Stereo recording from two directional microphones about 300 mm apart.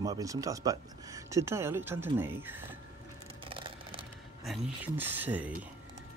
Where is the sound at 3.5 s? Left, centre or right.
Centre.